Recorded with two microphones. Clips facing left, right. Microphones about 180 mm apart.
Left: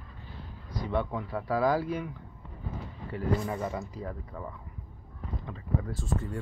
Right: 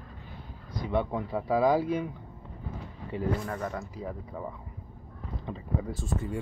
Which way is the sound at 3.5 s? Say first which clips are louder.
Left 1 dB; 5° left (ahead or behind).